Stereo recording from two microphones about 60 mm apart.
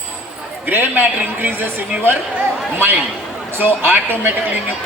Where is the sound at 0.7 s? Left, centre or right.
Right.